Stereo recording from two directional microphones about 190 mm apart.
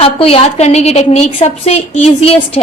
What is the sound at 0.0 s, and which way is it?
A woman's voice, 30° left (ahead or behind).